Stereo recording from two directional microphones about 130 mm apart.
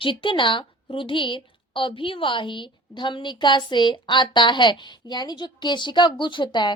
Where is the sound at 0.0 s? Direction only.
40° left (ahead or behind).